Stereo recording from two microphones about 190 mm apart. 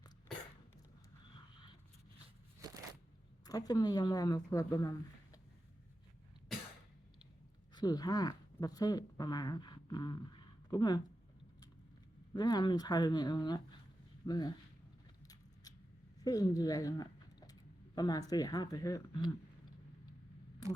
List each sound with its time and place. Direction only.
2.6 s crushing: 20° right (ahead or behind)
3.4 s speech: 20° left (ahead or behind)
7.8 s speech: 20° left (ahead or behind)
12.3 s speech: 20° left (ahead or behind)
16.2 s speech: 20° left (ahead or behind)